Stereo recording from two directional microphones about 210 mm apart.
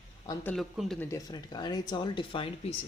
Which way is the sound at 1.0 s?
15° left (ahead or behind).